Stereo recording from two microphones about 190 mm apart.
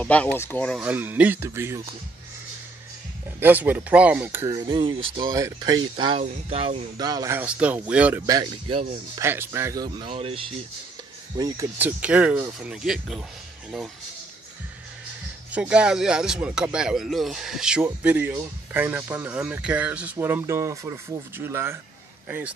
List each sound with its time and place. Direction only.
0.0 s speech: 5° left (ahead or behind)
0.7 s speech: 10° right (ahead or behind)
3.3 s speech: 10° right (ahead or behind); by 7.1 s 30° right (ahead or behind)
7.1 s speech: 15° right (ahead or behind)
8.3 s speech: 25° right (ahead or behind)
9.2 s speech: 10° right (ahead or behind); by 10.5 s 30° right (ahead or behind)
11.3 s speech: 20° right (ahead or behind); by 13.2 s centre (ahead or behind)
15.5 s speech: 5° right (ahead or behind)